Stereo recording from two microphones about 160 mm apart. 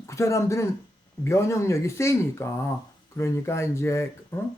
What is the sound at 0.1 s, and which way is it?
A man's voice, 20° left (ahead or behind).